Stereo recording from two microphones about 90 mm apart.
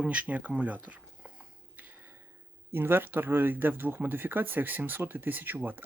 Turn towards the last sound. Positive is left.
turn(degrees=-20)  # may be behind; listen again after turning